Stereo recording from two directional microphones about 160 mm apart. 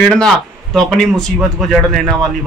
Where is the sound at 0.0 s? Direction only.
5° left (ahead or behind).